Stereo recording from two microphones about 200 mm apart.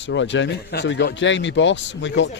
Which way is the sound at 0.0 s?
65° left (ahead or behind).